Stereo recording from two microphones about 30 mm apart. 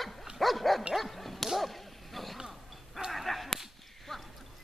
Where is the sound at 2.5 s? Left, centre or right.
Centre.